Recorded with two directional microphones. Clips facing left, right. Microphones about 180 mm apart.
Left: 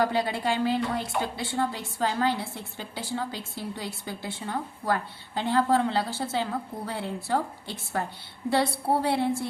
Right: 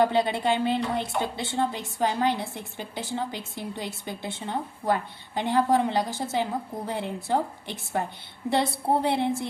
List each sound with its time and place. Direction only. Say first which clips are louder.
0.0 s a woman's voice: right 3 dB; 20° right (ahead or behind)